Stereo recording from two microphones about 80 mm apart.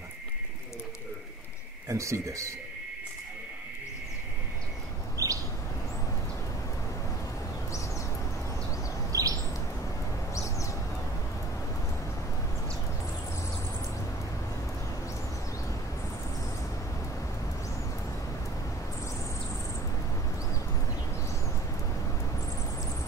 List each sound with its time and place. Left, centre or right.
1.9 s speech: right
5.1 s bird: right
9.1 s bird: right
10.3 s a sound: left